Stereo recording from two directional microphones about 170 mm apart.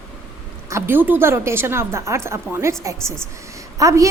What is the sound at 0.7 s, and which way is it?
A woman's voice, 10° right (ahead or behind).